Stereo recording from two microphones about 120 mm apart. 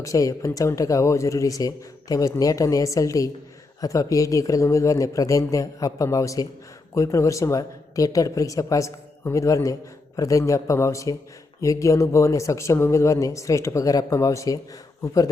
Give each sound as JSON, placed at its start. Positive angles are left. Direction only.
{"t": 0.0, "sound": "speech", "side_deg": 30}